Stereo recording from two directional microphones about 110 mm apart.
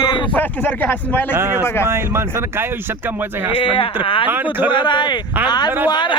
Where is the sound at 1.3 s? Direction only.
20° right (ahead or behind).